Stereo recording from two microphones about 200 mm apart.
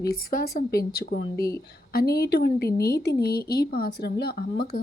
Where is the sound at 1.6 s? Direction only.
50° left (ahead or behind).